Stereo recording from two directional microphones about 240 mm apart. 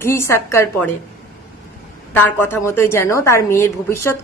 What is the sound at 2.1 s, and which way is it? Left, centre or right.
A woman's voice, centre.